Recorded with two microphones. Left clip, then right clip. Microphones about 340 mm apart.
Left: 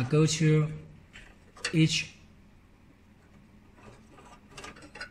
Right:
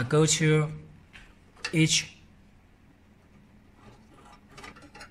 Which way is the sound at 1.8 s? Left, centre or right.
Centre.